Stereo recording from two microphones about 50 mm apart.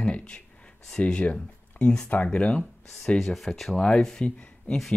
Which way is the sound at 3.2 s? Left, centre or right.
Centre.